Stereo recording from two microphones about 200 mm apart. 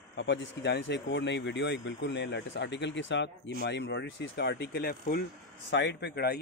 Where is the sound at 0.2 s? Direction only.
60° left (ahead or behind).